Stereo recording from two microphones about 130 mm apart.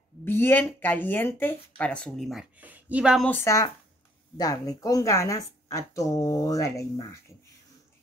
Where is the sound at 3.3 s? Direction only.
20° left (ahead or behind).